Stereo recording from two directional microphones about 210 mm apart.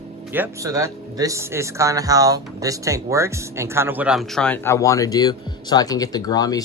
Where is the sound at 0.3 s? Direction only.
10° right (ahead or behind).